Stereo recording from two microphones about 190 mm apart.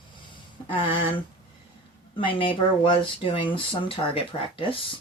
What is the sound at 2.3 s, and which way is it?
Speech, 25° left (ahead or behind).